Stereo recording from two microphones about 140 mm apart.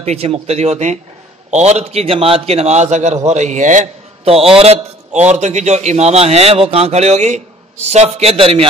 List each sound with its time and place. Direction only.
0.0 s a man's voice: 45° right (ahead or behind)
4.2 s a man's voice: 45° right (ahead or behind)